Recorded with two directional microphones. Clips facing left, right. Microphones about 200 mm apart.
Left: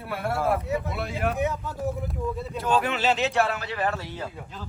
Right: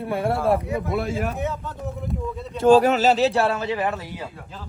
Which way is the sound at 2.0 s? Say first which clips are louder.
Right 1 dB; centre (ahead or behind).